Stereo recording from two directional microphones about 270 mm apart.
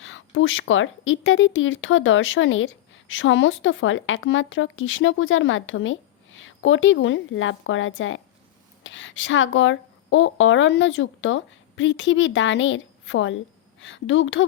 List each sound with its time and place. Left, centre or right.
0.0 s speech: left